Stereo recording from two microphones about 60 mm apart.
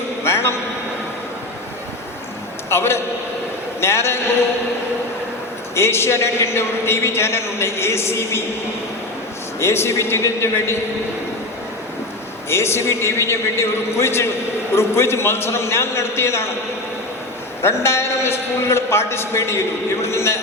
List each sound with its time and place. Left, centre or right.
0.2 s a sound: left
2.6 s a man's voice: left
5.7 s a man's voice: left
9.6 s a man's voice: left
12.5 s a man's voice: left
17.6 s a man's voice: left